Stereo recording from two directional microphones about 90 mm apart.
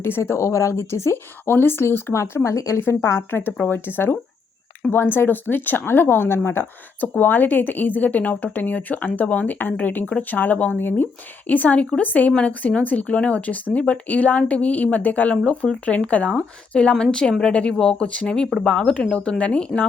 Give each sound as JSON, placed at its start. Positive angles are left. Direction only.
{"t": 0.0, "sound": "a woman's voice", "side_deg": 30}